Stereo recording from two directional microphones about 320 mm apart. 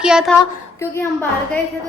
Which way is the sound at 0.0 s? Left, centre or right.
Centre.